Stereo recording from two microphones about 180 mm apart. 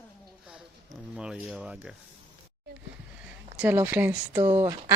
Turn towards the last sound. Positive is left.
turn(degrees=-15)  # may be behind; listen again after turning